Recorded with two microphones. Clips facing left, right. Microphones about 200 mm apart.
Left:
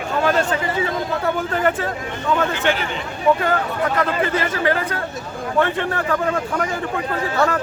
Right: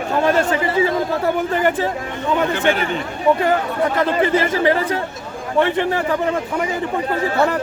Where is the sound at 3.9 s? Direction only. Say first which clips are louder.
Right 5 dB; 30° right (ahead or behind).